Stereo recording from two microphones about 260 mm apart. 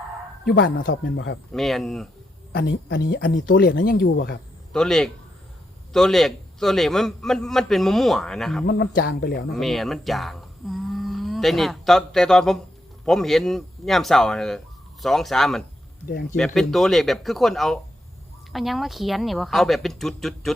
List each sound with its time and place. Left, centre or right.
0.4 s speech: left
1.5 s a man's voice: centre
2.5 s speech: left
4.7 s a man's voice: centre
8.6 s speech: left
9.5 s a man's voice: centre